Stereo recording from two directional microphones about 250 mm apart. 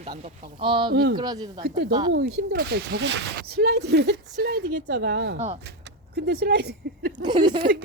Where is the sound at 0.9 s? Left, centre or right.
Right.